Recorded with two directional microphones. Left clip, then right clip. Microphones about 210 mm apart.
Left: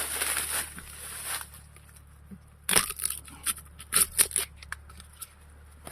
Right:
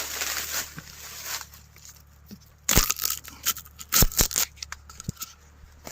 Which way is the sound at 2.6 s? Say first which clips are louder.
Right 4 dB; 40° right (ahead or behind).